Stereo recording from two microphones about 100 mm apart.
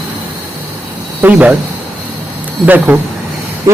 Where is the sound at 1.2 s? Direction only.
15° right (ahead or behind).